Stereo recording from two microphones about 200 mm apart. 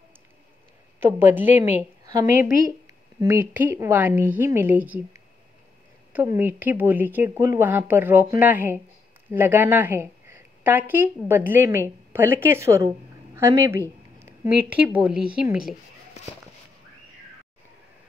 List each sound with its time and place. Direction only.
0.9 s a woman's voice: 10° right (ahead or behind)